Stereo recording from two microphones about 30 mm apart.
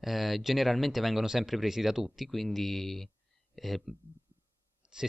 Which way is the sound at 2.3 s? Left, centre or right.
Centre.